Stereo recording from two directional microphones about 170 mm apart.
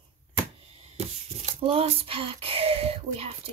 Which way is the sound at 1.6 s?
35° right (ahead or behind).